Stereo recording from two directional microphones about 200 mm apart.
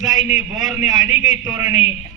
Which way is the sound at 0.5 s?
Centre (ahead or behind).